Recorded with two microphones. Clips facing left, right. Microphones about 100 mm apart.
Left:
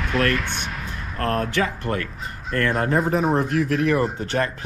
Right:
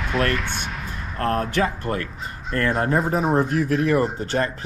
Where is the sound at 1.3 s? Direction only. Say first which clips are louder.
Right 1 dB; 35° right (ahead or behind).